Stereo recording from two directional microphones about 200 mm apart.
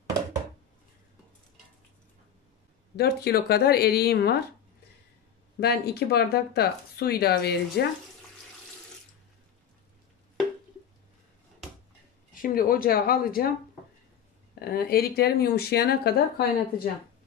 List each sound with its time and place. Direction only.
3.0 s speech: 50° left (ahead or behind)
5.6 s speech: 50° left (ahead or behind)
12.4 s speech: 45° left (ahead or behind)
14.6 s speech: 50° left (ahead or behind)